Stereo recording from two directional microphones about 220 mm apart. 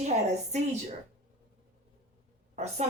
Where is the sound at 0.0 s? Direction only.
30° right (ahead or behind).